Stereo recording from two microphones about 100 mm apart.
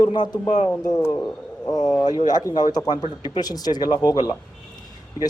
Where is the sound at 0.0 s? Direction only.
45° left (ahead or behind).